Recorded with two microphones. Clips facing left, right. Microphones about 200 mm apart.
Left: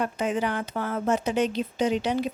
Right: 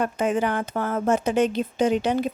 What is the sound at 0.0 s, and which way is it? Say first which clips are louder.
Speech: right 3 dB; 50° right (ahead or behind).